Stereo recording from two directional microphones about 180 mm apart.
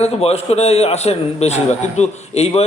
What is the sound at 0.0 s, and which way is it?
A man's voice, 35° left (ahead or behind).